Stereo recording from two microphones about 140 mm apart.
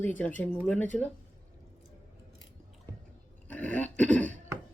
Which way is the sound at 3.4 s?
10° left (ahead or behind).